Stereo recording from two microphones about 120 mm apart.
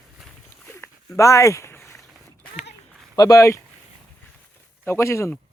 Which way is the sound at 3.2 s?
30° left (ahead or behind).